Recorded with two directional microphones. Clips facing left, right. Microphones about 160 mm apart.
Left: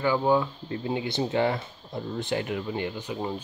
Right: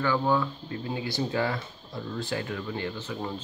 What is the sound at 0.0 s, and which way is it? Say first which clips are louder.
Speech: left 2 dB; 15° left (ahead or behind).